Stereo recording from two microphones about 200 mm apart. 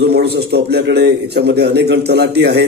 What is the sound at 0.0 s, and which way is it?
Speech, 55° right (ahead or behind).